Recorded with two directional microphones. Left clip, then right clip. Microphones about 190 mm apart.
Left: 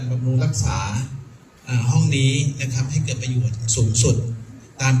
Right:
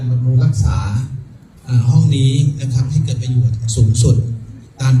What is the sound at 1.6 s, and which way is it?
A man's voice, 70° right (ahead or behind).